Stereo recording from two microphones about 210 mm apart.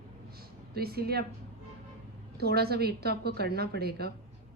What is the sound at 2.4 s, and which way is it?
Speech, 50° right (ahead or behind).